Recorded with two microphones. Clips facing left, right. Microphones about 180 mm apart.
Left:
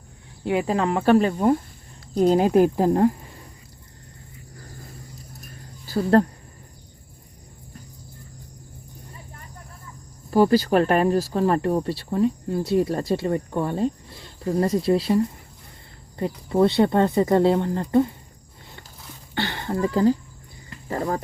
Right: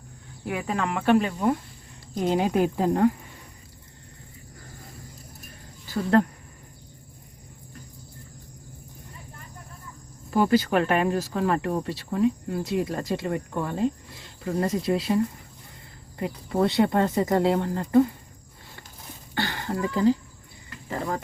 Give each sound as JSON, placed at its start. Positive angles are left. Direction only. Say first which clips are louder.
{"t": 0.4, "sound": "speech", "louder": "left 6 dB", "side_deg": 30}
{"t": 5.8, "sound": "speech", "louder": "left 3 dB", "side_deg": 35}
{"t": 10.3, "sound": "speech", "louder": "left 4 dB", "side_deg": 35}
{"t": 16.2, "sound": "speech", "louder": "left 5 dB", "side_deg": 25}
{"t": 19.3, "sound": "a sound", "louder": "left 2 dB", "side_deg": 20}
{"t": 19.9, "sound": "speech", "louder": "left 2 dB", "side_deg": 40}